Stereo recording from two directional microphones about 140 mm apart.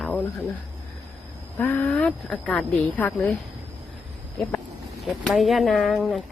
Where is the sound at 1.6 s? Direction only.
10° left (ahead or behind).